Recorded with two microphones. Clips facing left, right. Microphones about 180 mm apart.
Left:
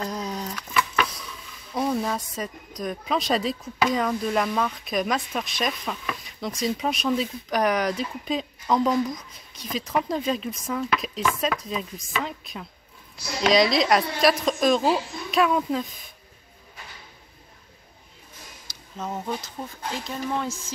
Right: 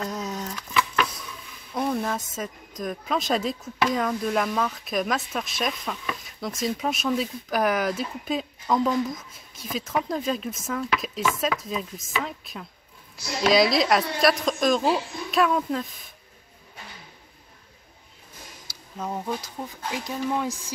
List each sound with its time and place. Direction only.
0.0 s a sound: centre (ahead or behind)
1.7 s speech: centre (ahead or behind)
18.9 s speech: 10° right (ahead or behind)